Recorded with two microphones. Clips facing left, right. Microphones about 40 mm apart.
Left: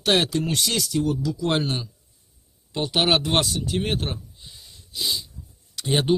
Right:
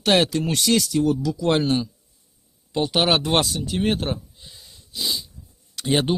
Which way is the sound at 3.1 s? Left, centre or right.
Right.